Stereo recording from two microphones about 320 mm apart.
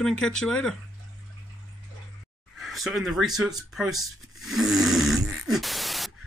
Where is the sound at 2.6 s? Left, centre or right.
Centre.